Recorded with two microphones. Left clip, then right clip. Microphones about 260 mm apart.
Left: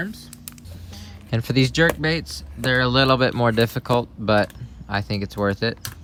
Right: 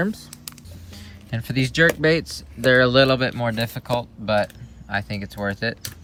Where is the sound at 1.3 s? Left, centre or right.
Left.